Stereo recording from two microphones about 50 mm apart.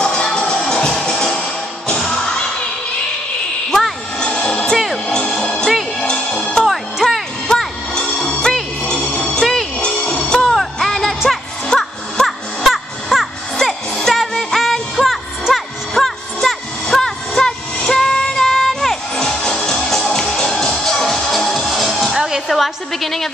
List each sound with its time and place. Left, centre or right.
0.0 s music: centre
4.2 s music: centre
6.6 s music: centre
7.4 s music: centre
10.4 s music: centre
12.3 s music: centre
17.4 s train: centre
18.5 s music: centre
22.5 s a sound: centre